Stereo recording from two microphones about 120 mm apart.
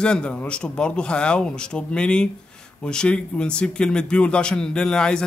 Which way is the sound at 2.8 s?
5° left (ahead or behind).